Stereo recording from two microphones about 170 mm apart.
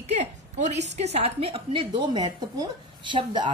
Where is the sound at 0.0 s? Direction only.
40° right (ahead or behind).